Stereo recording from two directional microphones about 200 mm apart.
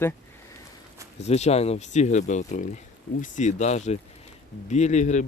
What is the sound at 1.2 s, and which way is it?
Speech, 30° left (ahead or behind).